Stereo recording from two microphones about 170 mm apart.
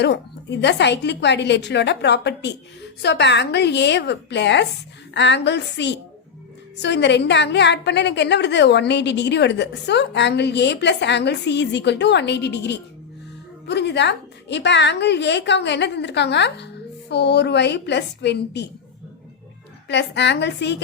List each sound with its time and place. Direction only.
0.0 s a woman's voice: 90° left
19.9 s a woman's voice: 90° left